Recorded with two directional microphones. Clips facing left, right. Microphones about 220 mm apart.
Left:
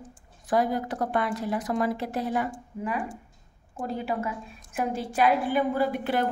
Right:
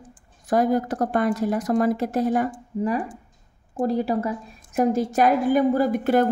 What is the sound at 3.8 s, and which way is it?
A woman's voice, 35° right (ahead or behind).